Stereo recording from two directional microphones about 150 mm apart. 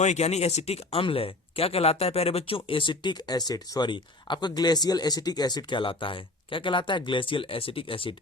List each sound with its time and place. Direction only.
0.0 s speech: 50° left (ahead or behind)